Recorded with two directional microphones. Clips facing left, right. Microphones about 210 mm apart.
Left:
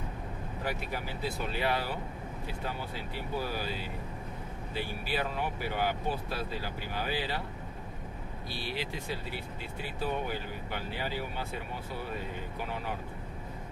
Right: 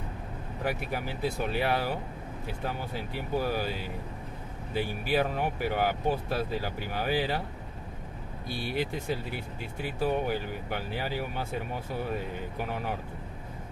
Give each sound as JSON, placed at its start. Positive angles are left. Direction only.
{"t": 0.7, "sound": "speech", "side_deg": -50}
{"t": 4.7, "sound": "speech", "side_deg": -50}
{"t": 8.5, "sound": "speech", "side_deg": -50}